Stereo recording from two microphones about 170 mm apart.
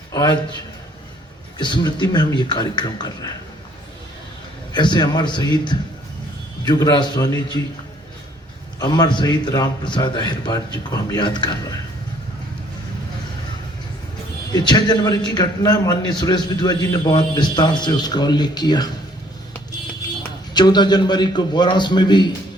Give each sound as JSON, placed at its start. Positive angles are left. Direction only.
{"t": 0.1, "sound": "a man's voice", "side_deg": 20}
{"t": 1.5, "sound": "a man's voice", "side_deg": 25}
{"t": 4.7, "sound": "a man's voice", "side_deg": 25}
{"t": 8.8, "sound": "a man's voice", "side_deg": 25}
{"t": 14.5, "sound": "a man's voice", "side_deg": 25}
{"t": 20.5, "sound": "a man's voice", "side_deg": 25}